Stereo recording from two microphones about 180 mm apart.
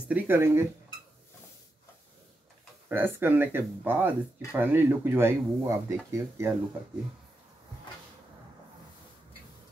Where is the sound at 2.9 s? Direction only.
10° right (ahead or behind).